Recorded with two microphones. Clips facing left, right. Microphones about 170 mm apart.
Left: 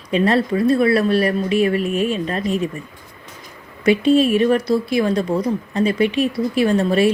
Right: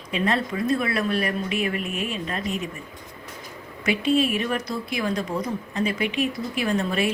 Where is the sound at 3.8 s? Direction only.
35° left (ahead or behind).